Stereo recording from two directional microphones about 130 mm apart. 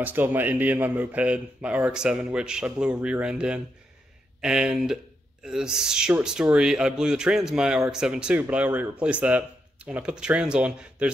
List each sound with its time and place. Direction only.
0.0 s a man's voice: 15° right (ahead or behind)